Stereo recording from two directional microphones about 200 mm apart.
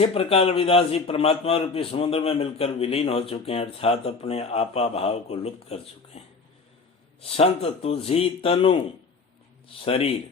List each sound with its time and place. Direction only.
0.0 s a man's voice: 30° left (ahead or behind)
9.8 s a man's voice: 30° left (ahead or behind)